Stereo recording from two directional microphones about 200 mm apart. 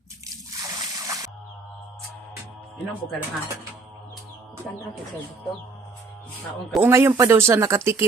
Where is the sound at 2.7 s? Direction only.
5° left (ahead or behind).